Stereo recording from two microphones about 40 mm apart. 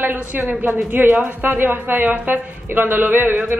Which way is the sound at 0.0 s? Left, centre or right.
Right.